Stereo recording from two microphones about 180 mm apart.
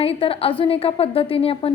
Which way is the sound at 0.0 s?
30° left (ahead or behind).